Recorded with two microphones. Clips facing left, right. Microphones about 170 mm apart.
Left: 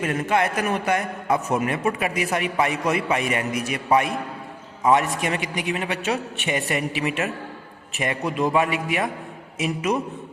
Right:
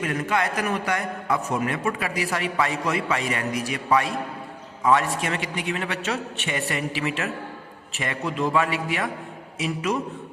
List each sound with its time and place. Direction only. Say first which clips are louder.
0.0 s a man's voice: left 3 dB; 25° left (ahead or behind)